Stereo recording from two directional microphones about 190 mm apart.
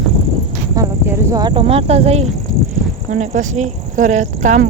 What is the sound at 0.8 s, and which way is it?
Speech, 15° right (ahead or behind).